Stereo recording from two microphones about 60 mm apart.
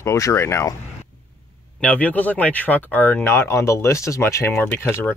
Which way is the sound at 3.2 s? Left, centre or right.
Left.